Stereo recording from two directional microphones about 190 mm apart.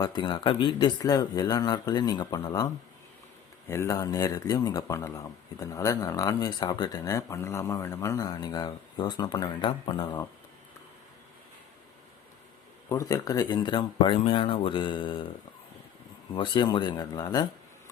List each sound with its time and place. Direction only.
0.0 s speech: 25° left (ahead or behind)
12.9 s speech: 20° left (ahead or behind)
16.3 s speech: 25° left (ahead or behind)